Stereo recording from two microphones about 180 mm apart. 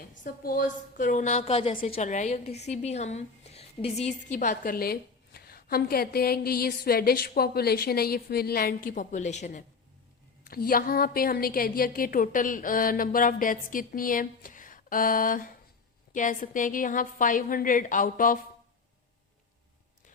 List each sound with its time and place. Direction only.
0.4 s a woman's voice: 50° left (ahead or behind)
10.4 s a woman's voice: 55° left (ahead or behind)